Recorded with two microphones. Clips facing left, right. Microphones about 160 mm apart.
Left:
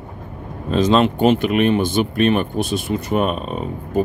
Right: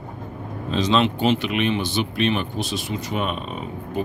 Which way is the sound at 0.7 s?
50° left (ahead or behind).